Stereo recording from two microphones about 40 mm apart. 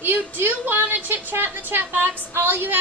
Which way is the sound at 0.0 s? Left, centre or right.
Right.